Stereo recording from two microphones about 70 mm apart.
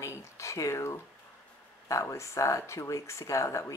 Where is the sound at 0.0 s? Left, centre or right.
Left.